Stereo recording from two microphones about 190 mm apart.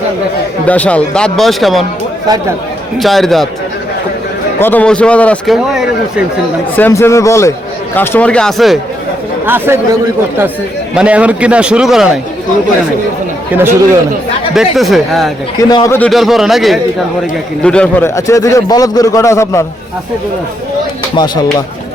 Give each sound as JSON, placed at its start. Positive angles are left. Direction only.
{"t": 0.6, "sound": "a man's voice", "side_deg": 5}
{"t": 3.0, "sound": "a man's voice", "side_deg": 0}
{"t": 4.6, "sound": "a man's voice", "side_deg": 10}
{"t": 6.7, "sound": "a man's voice", "side_deg": 10}
{"t": 9.5, "sound": "a man's voice", "side_deg": -10}
{"t": 14.5, "sound": "a man's voice", "side_deg": 0}
{"t": 15.7, "sound": "a man's voice", "side_deg": 15}
{"t": 16.0, "sound": "a man's voice", "side_deg": 0}
{"t": 21.2, "sound": "speech", "side_deg": 25}